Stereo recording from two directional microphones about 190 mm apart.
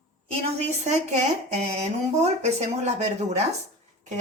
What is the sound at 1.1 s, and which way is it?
Speech, 35° right (ahead or behind).